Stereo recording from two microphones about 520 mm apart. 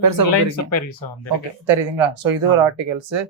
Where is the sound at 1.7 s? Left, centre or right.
Right.